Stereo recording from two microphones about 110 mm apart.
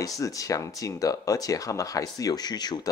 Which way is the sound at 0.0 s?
30° left (ahead or behind).